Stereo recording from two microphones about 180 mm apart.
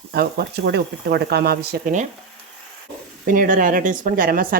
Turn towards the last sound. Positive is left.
turn(degrees=-50)  # may be behind; listen again after turning